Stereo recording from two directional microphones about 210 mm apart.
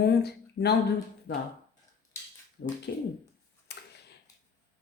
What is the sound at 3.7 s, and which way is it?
Tick-tock, 50° left (ahead or behind).